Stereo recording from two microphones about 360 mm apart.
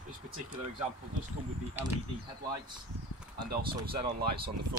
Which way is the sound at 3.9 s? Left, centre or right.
Right.